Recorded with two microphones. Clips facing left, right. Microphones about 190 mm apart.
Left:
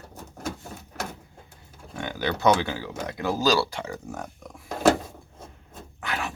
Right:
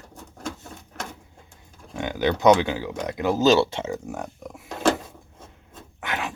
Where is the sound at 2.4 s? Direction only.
15° right (ahead or behind).